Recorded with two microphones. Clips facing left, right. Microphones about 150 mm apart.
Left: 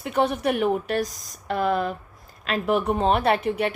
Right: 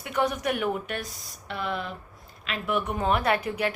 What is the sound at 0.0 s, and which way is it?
A woman's voice, 30° left (ahead or behind).